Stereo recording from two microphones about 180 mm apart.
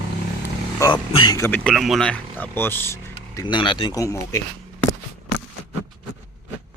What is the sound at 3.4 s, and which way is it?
Speech, 25° left (ahead or behind).